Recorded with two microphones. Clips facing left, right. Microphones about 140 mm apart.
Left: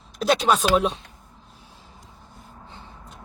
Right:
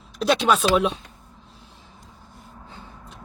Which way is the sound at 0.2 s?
Centre (ahead or behind).